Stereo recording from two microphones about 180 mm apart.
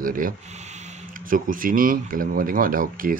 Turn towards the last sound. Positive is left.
turn(degrees=-50)  # may be behind; listen again after turning